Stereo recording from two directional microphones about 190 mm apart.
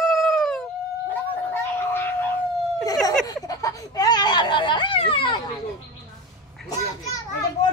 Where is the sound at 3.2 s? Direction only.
20° left (ahead or behind).